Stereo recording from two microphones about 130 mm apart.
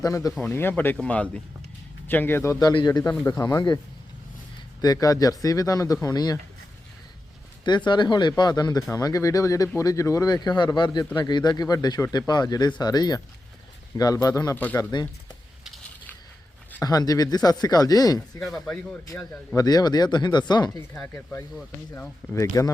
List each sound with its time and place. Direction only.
0.0 s speech: 25° left (ahead or behind)
0.4 s speech: 15° left (ahead or behind); by 3.8 s 30° left (ahead or behind)
4.8 s speech: 30° left (ahead or behind)
7.9 s speech: 35° left (ahead or behind)
14.5 s speech: 15° left (ahead or behind)
14.8 s speech: 30° left (ahead or behind)
16.8 s speech: 30° left (ahead or behind)
18.3 s speech: 5° left (ahead or behind)
19.5 s speech: 30° left (ahead or behind)
20.7 s speech: 10° left (ahead or behind); by 22.7 s 25° left (ahead or behind)